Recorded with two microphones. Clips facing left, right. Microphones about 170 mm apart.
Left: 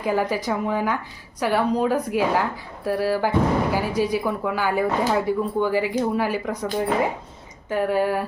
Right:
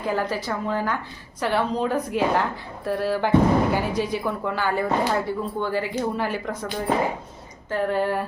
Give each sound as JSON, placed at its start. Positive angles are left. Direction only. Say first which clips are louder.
{"t": 0.0, "sound": "speech", "louder": "left 3 dB", "side_deg": 10}
{"t": 7.7, "sound": "speech", "louder": "left 2 dB", "side_deg": 10}